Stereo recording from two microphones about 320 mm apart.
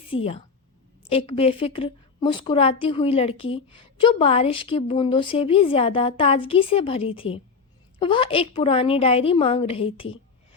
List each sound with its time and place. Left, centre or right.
0.1 s a woman's voice: centre